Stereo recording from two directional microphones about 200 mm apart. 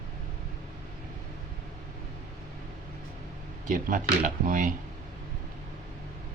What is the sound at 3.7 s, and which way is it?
Speech, 40° right (ahead or behind).